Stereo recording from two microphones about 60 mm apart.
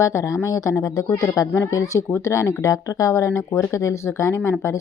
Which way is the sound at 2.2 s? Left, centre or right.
Left.